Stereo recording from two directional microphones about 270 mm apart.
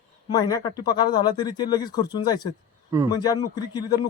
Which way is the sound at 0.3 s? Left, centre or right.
Centre.